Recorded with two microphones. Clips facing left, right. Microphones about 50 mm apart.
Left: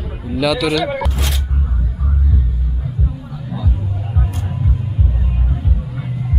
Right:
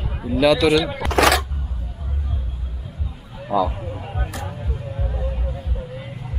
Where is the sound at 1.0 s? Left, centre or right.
Right.